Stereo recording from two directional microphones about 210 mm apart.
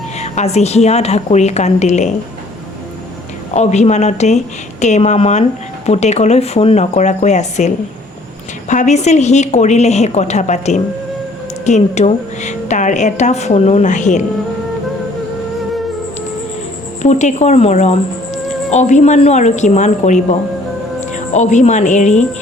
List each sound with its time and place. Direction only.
0.2 s speech: 30° left (ahead or behind)
3.5 s speech: 35° left (ahead or behind)
8.7 s speech: 35° left (ahead or behind)
17.0 s speech: 35° left (ahead or behind)